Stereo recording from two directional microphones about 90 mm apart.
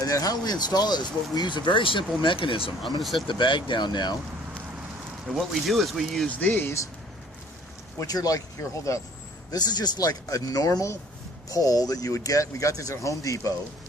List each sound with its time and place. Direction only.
0.0 s speech: 40° left (ahead or behind); by 2.7 s 75° left (ahead or behind)
3.0 s speech: centre (ahead or behind)
3.2 s speech: 60° left (ahead or behind)
5.3 s speech: centre (ahead or behind)
7.9 s speech: 45° left (ahead or behind)
9.5 s speech: 50° left (ahead or behind)